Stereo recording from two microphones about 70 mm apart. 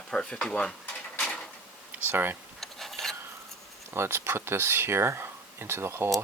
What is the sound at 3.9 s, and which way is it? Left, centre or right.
Speech, right.